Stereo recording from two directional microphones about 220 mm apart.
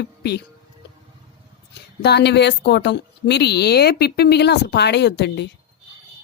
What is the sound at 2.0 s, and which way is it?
A woman's voice, 50° left (ahead or behind).